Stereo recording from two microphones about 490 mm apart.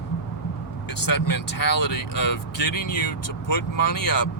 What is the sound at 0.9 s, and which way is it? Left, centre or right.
Speech, left.